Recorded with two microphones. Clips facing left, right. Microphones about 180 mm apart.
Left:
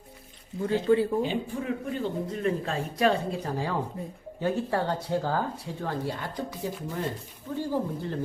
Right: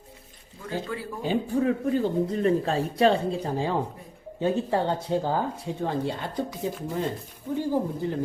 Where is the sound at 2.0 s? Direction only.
35° right (ahead or behind).